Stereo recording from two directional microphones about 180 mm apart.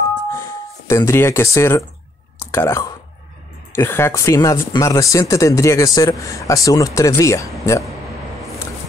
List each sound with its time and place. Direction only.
0.3 s speech: 15° left (ahead or behind)
2.3 s clicking: 15° left (ahead or behind)
3.7 s speech: 15° left (ahead or behind)